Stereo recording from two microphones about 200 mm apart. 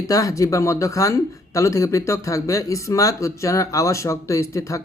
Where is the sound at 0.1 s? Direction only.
15° left (ahead or behind).